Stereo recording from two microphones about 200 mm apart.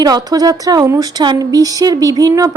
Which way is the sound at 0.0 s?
20° right (ahead or behind).